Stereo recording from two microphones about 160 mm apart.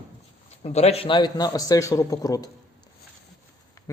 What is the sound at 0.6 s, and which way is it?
Speech, 40° left (ahead or behind).